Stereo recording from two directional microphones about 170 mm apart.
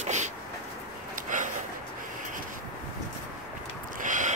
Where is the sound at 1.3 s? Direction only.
50° right (ahead or behind).